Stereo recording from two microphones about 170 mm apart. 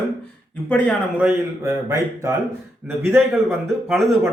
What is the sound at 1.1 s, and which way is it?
Speech, 10° right (ahead or behind).